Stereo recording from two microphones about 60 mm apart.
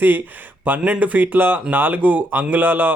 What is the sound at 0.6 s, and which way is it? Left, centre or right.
Speech, right.